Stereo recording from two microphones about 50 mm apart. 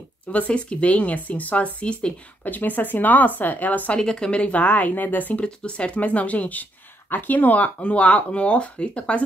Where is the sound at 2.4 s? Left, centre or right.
Left.